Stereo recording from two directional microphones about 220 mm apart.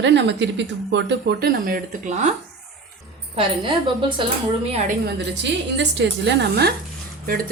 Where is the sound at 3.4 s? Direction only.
20° right (ahead or behind).